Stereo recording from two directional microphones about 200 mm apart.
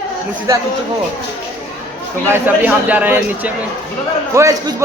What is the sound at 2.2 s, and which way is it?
Speech, 10° right (ahead or behind).